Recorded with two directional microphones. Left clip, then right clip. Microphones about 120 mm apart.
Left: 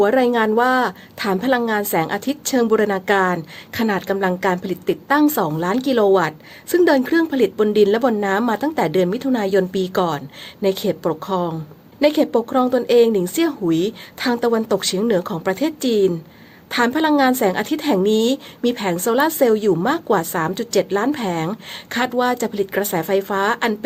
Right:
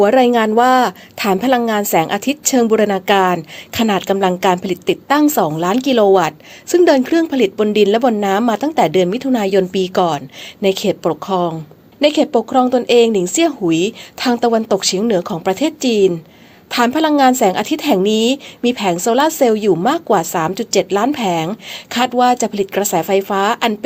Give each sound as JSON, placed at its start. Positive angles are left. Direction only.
{"t": 0.0, "sound": "a woman's voice", "side_deg": -35}